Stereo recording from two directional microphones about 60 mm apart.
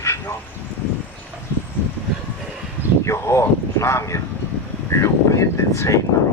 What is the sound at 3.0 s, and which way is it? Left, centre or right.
Speech, left.